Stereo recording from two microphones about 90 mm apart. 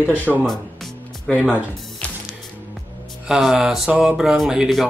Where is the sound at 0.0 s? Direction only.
20° left (ahead or behind).